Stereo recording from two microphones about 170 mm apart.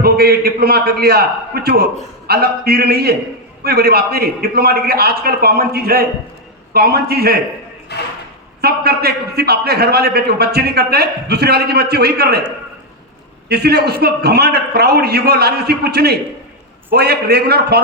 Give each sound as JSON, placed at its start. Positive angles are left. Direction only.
{"t": 0.0, "sound": "a man's voice", "side_deg": -65}
{"t": 7.9, "sound": "speech", "side_deg": 75}
{"t": 8.6, "sound": "a man's voice", "side_deg": -70}
{"t": 13.5, "sound": "a man's voice", "side_deg": -70}